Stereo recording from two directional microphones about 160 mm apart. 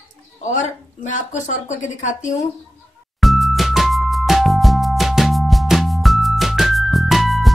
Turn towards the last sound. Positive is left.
turn(degrees=0)  # may be behind; listen again after turning